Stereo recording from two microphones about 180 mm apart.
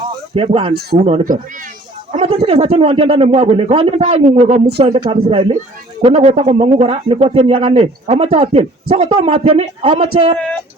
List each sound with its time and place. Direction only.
0.3 s speech: 30° right (ahead or behind)
10.3 s speech: 5° left (ahead or behind)